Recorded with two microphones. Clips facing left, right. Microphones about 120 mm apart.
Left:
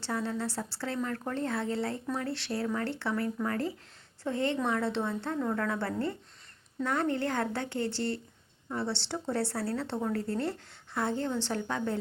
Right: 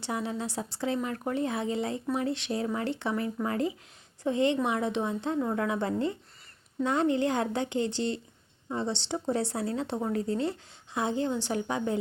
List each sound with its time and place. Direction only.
0.0 s speech: 15° right (ahead or behind)